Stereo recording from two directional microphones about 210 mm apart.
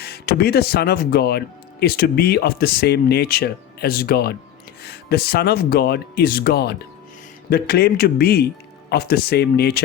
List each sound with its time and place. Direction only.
0.0 s speech: 50° left (ahead or behind)